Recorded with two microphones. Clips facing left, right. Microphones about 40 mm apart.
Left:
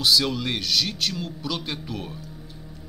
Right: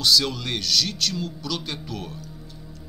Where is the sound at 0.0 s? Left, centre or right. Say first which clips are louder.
Even; centre.